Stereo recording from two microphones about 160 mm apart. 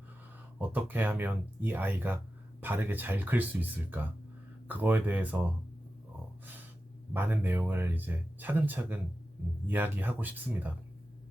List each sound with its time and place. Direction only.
0.6 s speech: 10° right (ahead or behind)
7.1 s speech: 10° right (ahead or behind)